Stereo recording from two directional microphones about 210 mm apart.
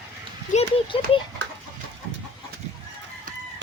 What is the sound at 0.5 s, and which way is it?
Speech, 25° left (ahead or behind).